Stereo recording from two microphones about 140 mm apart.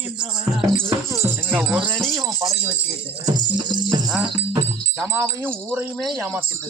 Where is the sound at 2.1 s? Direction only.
20° right (ahead or behind).